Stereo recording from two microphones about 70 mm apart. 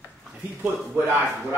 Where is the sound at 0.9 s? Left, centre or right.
Right.